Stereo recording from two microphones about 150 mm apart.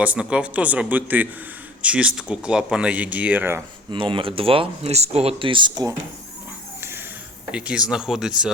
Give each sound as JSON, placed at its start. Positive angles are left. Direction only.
{"t": 0.0, "sound": "speech", "side_deg": -10}
{"t": 3.9, "sound": "speech", "side_deg": -35}
{"t": 7.5, "sound": "speech", "side_deg": -5}